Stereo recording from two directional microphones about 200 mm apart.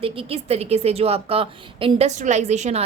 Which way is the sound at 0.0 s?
30° right (ahead or behind).